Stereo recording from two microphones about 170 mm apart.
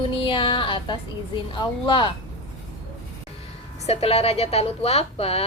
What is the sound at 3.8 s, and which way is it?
A woman's voice, 35° left (ahead or behind).